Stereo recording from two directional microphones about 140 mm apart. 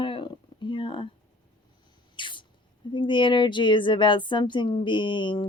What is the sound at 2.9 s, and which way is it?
Speech, 35° left (ahead or behind).